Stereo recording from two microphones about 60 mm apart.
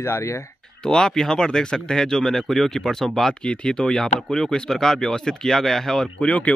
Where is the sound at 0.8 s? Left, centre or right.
Centre.